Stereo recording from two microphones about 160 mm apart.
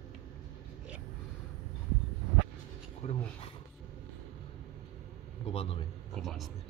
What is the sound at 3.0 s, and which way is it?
Speech, 45° left (ahead or behind).